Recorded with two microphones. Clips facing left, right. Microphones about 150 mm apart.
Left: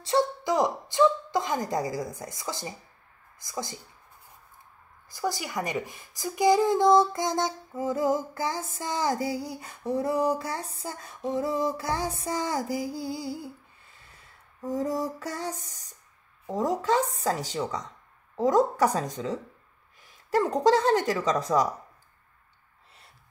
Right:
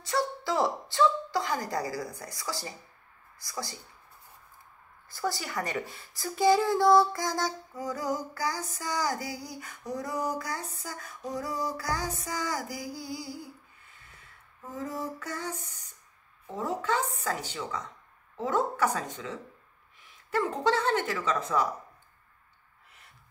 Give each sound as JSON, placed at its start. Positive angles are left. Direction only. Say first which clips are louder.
{"t": 0.0, "sound": "a woman's voice", "louder": "left 5 dB", "side_deg": 20}
{"t": 5.1, "sound": "speech", "louder": "left 2 dB", "side_deg": 15}
{"t": 14.6, "sound": "speech", "louder": "left 7 dB", "side_deg": 35}